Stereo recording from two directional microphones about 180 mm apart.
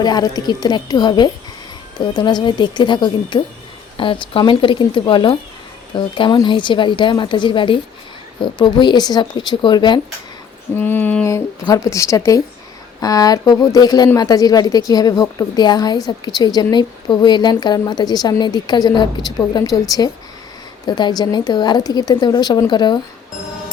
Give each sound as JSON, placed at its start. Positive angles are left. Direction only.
{"t": 0.0, "sound": "speech", "side_deg": 20}
{"t": 10.8, "sound": "speech", "side_deg": 10}